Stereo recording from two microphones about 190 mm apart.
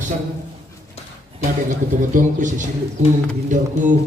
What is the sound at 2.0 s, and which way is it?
Speech, 40° right (ahead or behind).